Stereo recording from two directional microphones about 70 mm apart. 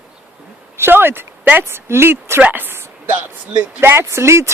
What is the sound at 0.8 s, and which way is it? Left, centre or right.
Speech, right.